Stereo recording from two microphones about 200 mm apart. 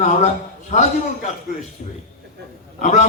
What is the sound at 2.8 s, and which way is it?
Speech, 35° left (ahead or behind).